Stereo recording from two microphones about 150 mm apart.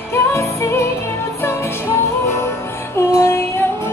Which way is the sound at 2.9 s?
15° left (ahead or behind).